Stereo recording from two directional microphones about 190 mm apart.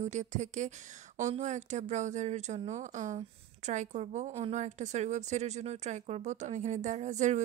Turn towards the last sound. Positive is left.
turn(degrees=-40)  # may be behind; listen again after turning